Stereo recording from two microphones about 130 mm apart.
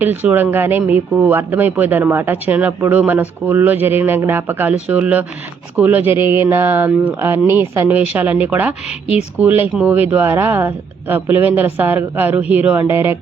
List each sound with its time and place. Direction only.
0.0 s speech: 15° right (ahead or behind)